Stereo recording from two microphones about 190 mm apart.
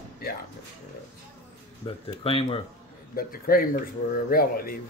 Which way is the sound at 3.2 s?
50° left (ahead or behind).